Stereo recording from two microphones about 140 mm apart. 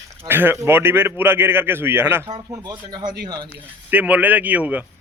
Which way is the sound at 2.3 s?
30° right (ahead or behind).